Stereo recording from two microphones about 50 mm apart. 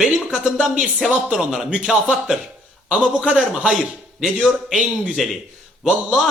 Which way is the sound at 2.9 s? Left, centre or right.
Centre.